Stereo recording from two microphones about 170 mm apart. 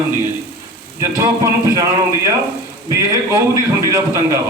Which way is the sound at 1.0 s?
15° right (ahead or behind).